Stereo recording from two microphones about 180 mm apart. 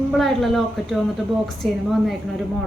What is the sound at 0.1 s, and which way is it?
A woman's voice, centre (ahead or behind).